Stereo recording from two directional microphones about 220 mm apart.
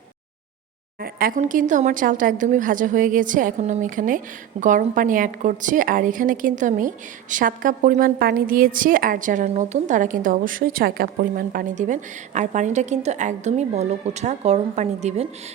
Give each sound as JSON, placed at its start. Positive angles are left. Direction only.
{"t": 0.9, "sound": "a woman's voice", "side_deg": -40}